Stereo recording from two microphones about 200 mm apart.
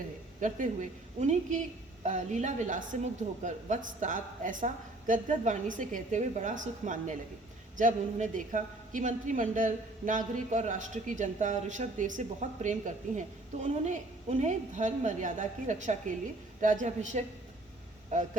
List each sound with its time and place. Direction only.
0.3 s a woman's voice: 40° right (ahead or behind)